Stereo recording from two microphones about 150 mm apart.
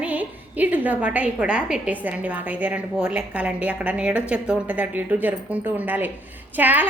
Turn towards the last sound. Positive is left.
turn(degrees=-10)  # may be behind; listen again after turning